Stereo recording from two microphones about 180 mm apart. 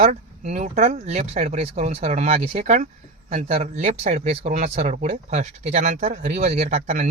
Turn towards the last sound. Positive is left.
turn(degrees=-40)  # may be behind; listen again after turning